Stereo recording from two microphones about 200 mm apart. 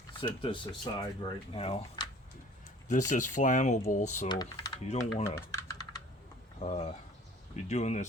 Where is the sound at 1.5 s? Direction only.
30° left (ahead or behind).